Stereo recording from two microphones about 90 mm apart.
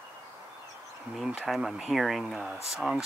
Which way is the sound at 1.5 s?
5° right (ahead or behind).